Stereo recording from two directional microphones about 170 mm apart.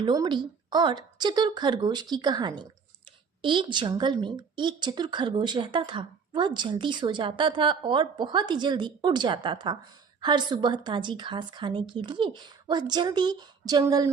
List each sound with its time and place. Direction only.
0.0 s a woman's voice: 25° right (ahead or behind)